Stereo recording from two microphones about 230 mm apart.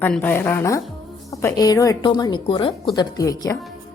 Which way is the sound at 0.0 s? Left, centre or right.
Centre.